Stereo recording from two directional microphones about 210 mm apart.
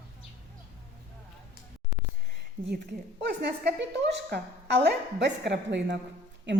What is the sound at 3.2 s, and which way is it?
A woman's voice, 55° right (ahead or behind).